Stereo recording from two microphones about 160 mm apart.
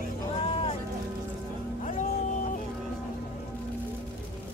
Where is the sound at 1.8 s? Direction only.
50° left (ahead or behind).